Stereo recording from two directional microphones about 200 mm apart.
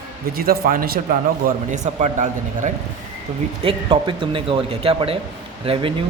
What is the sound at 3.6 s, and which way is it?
Speech, 25° right (ahead or behind).